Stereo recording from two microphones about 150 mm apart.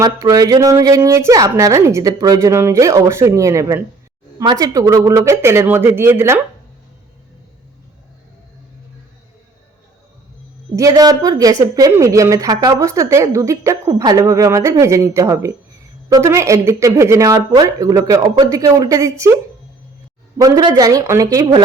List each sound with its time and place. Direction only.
0.0 s a woman's voice: 25° right (ahead or behind)
10.8 s a woman's voice: 25° right (ahead or behind)
20.4 s a woman's voice: 25° right (ahead or behind)